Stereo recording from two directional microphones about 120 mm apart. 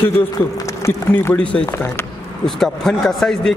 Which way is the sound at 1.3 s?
10° left (ahead or behind).